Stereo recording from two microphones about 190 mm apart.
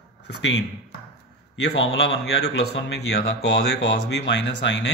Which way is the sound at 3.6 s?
60° left (ahead or behind).